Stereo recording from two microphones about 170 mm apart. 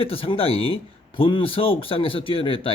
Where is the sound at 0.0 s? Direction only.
35° left (ahead or behind).